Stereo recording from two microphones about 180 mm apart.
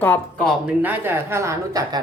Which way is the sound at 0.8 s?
10° right (ahead or behind).